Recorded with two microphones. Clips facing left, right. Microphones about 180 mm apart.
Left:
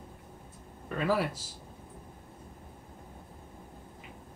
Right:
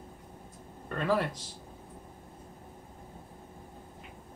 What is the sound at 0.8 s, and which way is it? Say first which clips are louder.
Speech: even; 5° left (ahead or behind).